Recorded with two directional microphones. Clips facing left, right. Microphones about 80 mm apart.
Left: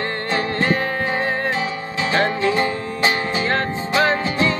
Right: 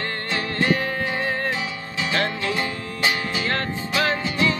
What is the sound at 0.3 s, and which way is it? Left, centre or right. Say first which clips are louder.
Music: left 2 dB; left.